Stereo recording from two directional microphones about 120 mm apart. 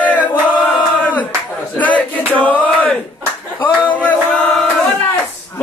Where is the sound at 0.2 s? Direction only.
15° left (ahead or behind).